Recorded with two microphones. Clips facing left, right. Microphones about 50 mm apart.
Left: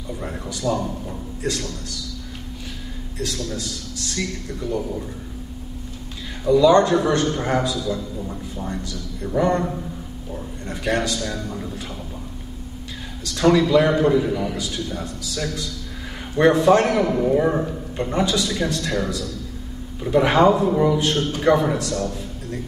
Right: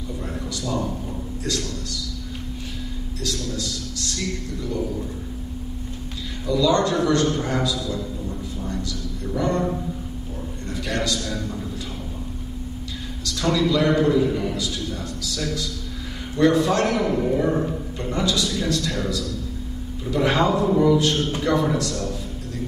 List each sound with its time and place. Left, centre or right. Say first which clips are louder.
0.7 s a man's voice: left 3 dB; left
6.4 s a man's voice: left 5 dB; left
10.7 s a man's voice: left 3 dB; left
13.2 s a man's voice: left 5 dB; left
17.1 s a man's voice: left 2 dB; centre; by 18.9 s left
20.2 s a man's voice: left 3 dB; left